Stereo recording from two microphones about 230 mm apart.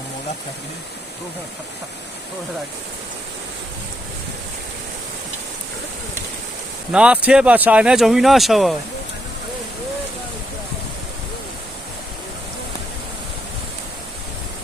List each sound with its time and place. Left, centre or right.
6.9 s speech: centre